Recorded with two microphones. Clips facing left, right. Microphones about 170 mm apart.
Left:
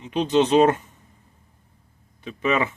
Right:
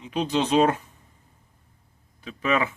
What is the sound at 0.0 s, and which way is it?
Speech, 5° right (ahead or behind).